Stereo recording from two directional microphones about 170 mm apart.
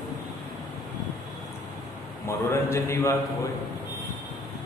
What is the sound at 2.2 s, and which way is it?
Speech, 15° left (ahead or behind).